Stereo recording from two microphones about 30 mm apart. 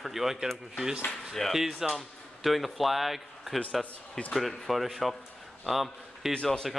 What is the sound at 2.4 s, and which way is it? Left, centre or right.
Speech, centre.